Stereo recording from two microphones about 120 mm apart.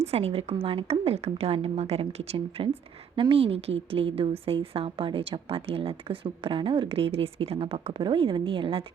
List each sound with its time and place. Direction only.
0.0 s a woman's voice: 55° right (ahead or behind)